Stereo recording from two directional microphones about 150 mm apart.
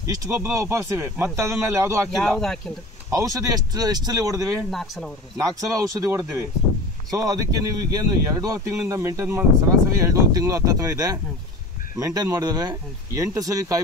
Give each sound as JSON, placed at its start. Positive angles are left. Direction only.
{"t": 0.0, "sound": "speech", "side_deg": -20}
{"t": 2.1, "sound": "speech", "side_deg": 5}
{"t": 3.1, "sound": "speech", "side_deg": -20}
{"t": 4.6, "sound": "speech", "side_deg": 0}
{"t": 5.4, "sound": "speech", "side_deg": -20}